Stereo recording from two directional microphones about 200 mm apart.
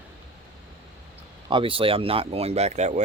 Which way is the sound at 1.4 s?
25° right (ahead or behind).